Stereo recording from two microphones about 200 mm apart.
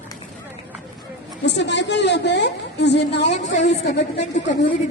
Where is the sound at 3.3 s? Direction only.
35° left (ahead or behind).